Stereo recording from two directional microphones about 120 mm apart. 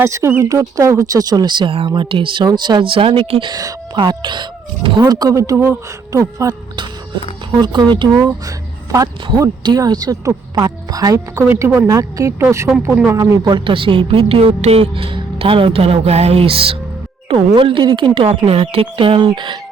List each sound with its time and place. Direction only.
0.0 s speech: 25° right (ahead or behind); by 3.5 s 50° right (ahead or behind)
3.5 s speech: 30° right (ahead or behind)
7.6 s speech: 35° right (ahead or behind)
11.4 s speech: 20° right (ahead or behind); by 19.5 s 40° right (ahead or behind)